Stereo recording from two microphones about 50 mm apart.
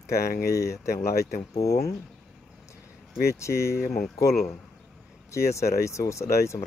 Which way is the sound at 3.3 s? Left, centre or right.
Left.